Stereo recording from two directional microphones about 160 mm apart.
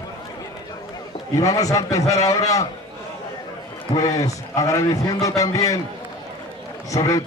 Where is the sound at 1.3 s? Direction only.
20° left (ahead or behind).